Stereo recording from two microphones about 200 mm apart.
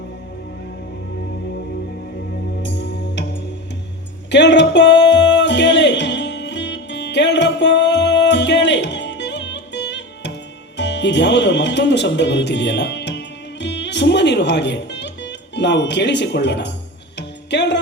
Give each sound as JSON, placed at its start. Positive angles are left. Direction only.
{"t": 2.6, "sound": "music", "side_deg": 60}
{"t": 4.3, "sound": "music", "side_deg": 60}